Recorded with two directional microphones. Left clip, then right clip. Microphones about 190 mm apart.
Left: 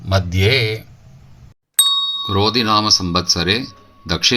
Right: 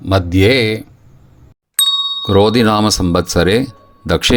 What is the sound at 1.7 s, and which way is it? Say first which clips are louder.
Ding: right 2 dB; centre (ahead or behind).